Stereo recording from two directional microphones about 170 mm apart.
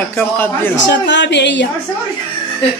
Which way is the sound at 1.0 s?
90° left.